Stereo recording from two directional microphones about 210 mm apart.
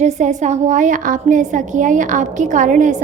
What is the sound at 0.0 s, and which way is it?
A woman's voice, 35° right (ahead or behind).